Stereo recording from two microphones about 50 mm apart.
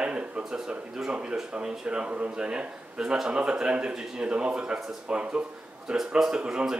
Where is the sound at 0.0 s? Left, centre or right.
Centre.